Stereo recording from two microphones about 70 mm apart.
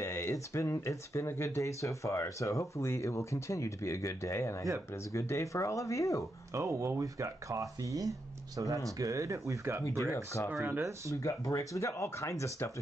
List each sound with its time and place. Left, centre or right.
0.0 s speech: left
6.5 s speech: right
10.5 s speech: right
11.1 s speech: left